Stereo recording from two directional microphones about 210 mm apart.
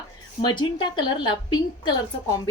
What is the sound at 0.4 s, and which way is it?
Speech, 20° left (ahead or behind).